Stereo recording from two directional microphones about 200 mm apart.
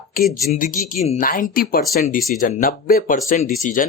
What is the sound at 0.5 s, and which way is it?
Speech, 40° left (ahead or behind).